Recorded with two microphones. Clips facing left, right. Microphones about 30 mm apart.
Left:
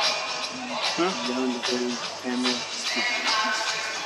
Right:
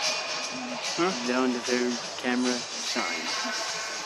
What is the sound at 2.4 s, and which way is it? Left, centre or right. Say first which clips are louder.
Speech: left 2 dB; left.